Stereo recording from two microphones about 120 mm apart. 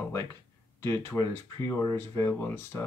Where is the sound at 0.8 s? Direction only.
20° left (ahead or behind).